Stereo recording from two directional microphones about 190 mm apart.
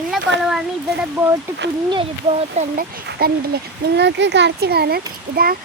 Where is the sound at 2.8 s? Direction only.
55° right (ahead or behind).